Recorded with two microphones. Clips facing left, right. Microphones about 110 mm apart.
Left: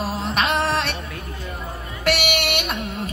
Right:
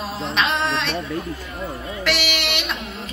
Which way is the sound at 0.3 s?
50° left (ahead or behind).